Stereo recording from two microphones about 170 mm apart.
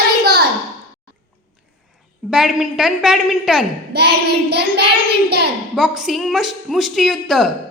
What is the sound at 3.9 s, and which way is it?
Speech, 75° right (ahead or behind).